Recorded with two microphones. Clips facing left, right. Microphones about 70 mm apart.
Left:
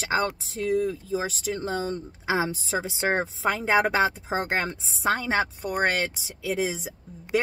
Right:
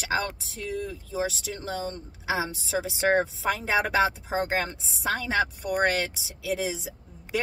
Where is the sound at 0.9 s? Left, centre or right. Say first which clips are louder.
Left 2 dB; left.